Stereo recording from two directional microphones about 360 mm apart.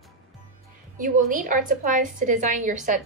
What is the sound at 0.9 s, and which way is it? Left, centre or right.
A woman's voice, right.